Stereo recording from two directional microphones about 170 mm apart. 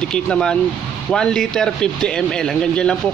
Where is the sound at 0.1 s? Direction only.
5° left (ahead or behind).